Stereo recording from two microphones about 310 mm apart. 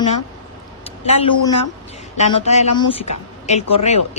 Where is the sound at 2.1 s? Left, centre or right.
Left.